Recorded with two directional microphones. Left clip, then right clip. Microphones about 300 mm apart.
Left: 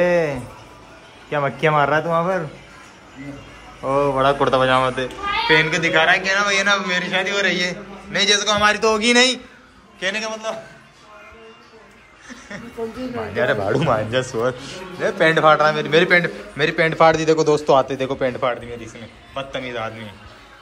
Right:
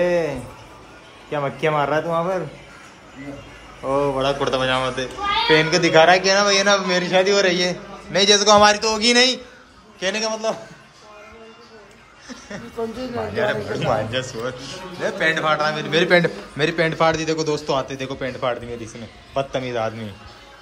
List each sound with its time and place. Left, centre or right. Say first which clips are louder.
0.0 s speech: left 2 dB; centre
1.5 s a man's voice: left 3 dB; centre
3.8 s a child's voice: left 3 dB; centre
8.7 s a child's voice: left 2 dB; centre
12.3 s a sound: even; centre
13.1 s a child's voice: left 2 dB; centre